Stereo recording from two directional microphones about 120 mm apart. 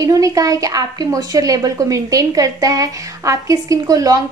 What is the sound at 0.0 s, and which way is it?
A woman's voice, 30° right (ahead or behind).